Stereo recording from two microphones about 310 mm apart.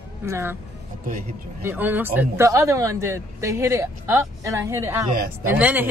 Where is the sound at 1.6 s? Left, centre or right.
Centre.